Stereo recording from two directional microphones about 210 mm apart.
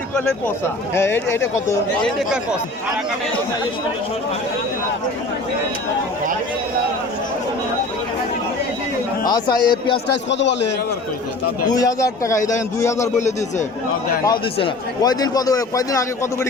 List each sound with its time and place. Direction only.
0.9 s a man's voice: 10° left (ahead or behind)
2.0 s speech: centre (ahead or behind)
9.2 s speech: 20° left (ahead or behind)
10.2 s a man's voice: 55° left (ahead or behind)
11.7 s a man's voice: 15° left (ahead or behind)
13.1 s speech: 35° left (ahead or behind)
14.3 s a man's voice: 20° left (ahead or behind)